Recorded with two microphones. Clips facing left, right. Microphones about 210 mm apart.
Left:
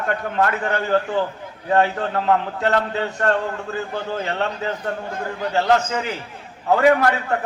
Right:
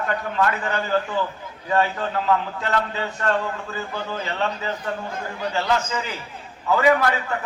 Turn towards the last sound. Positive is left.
turn(degrees=60)  # may be behind; listen again after turning